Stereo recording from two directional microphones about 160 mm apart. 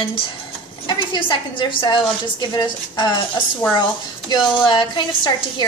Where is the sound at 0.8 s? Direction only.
30° left (ahead or behind).